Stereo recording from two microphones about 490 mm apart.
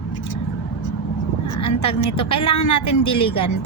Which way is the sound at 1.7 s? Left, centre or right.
Left.